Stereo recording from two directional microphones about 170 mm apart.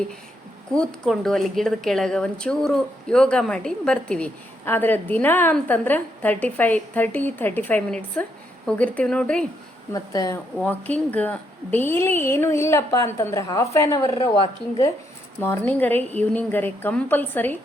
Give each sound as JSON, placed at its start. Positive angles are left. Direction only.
{"t": 0.7, "sound": "a woman's voice", "side_deg": 5}
{"t": 9.9, "sound": "a woman's voice", "side_deg": 20}
{"t": 10.6, "sound": "a woman's voice", "side_deg": 10}